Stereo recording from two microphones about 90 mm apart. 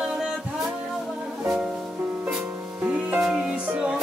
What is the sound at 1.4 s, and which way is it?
Music, 10° right (ahead or behind).